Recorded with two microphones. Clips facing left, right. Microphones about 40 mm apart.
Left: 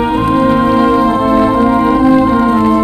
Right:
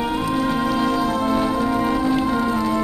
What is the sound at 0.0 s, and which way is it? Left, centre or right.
Music, left.